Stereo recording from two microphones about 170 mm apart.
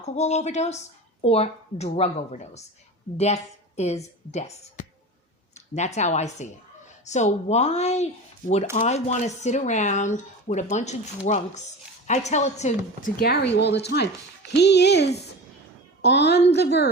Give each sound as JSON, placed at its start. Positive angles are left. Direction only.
{"t": 0.0, "sound": "a woman's voice", "side_deg": 40}